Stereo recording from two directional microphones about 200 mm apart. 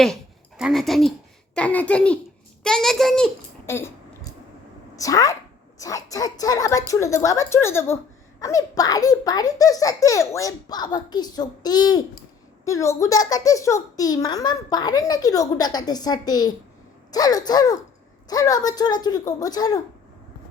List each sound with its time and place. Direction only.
0.0 s a woman's voice: centre (ahead or behind)
3.7 s a sound: 10° left (ahead or behind)
4.9 s a child's voice: 15° left (ahead or behind)